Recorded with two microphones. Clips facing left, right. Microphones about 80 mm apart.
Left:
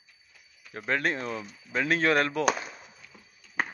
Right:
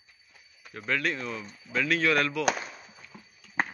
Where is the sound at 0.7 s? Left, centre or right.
Left.